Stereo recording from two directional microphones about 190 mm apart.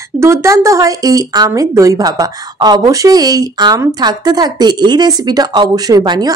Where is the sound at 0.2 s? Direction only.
15° right (ahead or behind).